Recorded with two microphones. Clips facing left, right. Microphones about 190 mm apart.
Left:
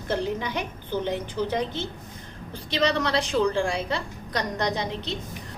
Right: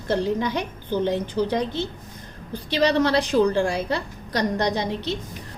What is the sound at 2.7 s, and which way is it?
A woman's voice, 35° right (ahead or behind).